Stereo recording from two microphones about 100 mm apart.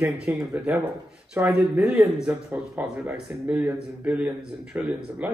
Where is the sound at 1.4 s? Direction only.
25° right (ahead or behind).